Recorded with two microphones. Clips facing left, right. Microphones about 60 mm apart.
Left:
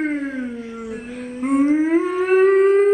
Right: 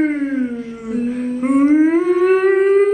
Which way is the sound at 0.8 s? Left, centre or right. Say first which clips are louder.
Right 10 dB; right.